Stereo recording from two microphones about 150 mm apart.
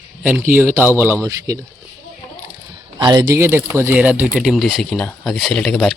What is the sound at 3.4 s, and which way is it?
Speech, 15° right (ahead or behind).